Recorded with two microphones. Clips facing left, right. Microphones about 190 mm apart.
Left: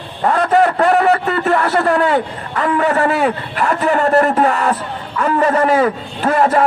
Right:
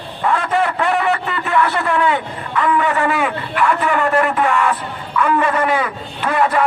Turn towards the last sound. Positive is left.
turn(degrees=40)  # may be behind; listen again after turning